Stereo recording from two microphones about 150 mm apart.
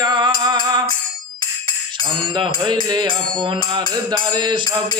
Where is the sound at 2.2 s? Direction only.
35° right (ahead or behind).